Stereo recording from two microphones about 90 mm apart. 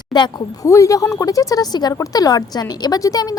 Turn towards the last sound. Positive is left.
turn(degrees=40)  # may be behind; listen again after turning